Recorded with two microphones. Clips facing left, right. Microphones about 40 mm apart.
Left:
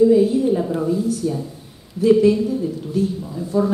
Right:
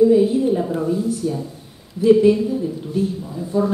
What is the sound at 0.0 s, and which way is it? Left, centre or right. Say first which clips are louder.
A woman's voice: even; centre.